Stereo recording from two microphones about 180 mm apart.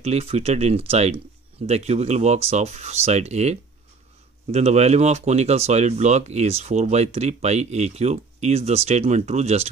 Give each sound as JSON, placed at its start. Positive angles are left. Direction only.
{"t": 0.0, "sound": "speech", "side_deg": -35}